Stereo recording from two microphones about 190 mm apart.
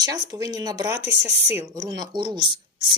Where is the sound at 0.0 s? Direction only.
20° right (ahead or behind).